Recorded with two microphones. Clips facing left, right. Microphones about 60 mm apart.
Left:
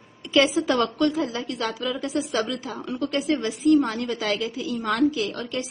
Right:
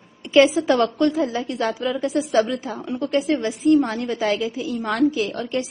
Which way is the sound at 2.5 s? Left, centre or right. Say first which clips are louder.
Right 4 dB; right.